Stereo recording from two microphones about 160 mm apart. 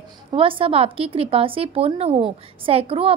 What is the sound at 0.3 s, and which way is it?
A woman's voice, 35° right (ahead or behind).